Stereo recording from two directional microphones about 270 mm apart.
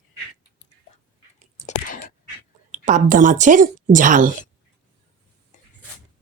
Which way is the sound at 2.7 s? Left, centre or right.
Right.